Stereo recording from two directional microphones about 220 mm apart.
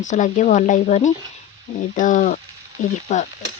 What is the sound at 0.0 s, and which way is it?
Speech, 35° left (ahead or behind).